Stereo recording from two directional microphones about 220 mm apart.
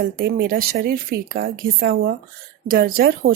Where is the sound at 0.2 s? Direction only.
45° right (ahead or behind).